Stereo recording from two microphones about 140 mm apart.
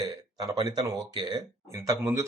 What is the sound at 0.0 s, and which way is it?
Speech, 30° right (ahead or behind).